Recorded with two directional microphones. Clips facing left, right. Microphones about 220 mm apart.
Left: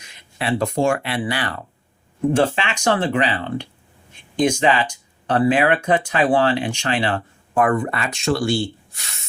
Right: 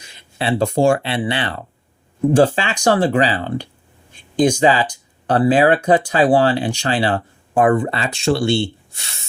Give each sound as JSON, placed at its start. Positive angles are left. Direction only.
{"t": 0.0, "sound": "speech", "side_deg": -30}